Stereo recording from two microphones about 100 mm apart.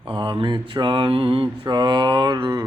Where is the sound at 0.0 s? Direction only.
55° right (ahead or behind).